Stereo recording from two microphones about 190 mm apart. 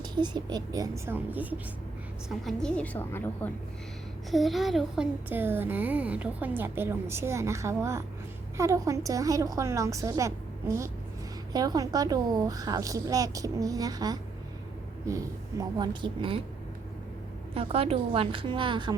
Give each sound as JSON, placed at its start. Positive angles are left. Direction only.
{"t": 0.0, "sound": "a woman's voice", "side_deg": -25}
{"t": 4.3, "sound": "a woman's voice", "side_deg": 0}
{"t": 17.5, "sound": "speech", "side_deg": -30}